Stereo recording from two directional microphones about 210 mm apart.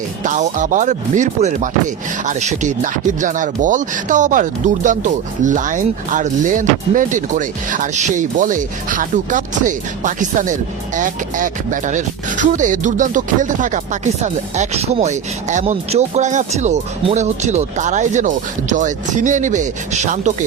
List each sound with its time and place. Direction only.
0.2 s speech: 35° right (ahead or behind)